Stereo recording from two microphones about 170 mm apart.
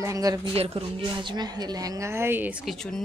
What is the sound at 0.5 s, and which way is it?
A woman's voice, 35° right (ahead or behind).